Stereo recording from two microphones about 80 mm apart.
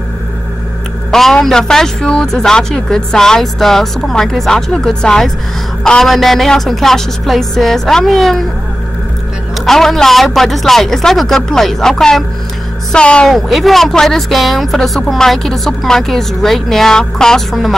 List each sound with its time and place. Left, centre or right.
1.1 s a man's voice: centre
9.7 s a man's voice: centre
13.3 s a man's voice: centre